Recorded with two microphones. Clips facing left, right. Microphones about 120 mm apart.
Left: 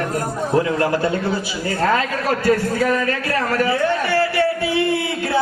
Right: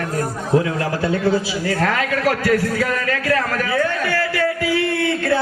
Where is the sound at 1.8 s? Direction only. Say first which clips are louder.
Left 1 dB; 85° right.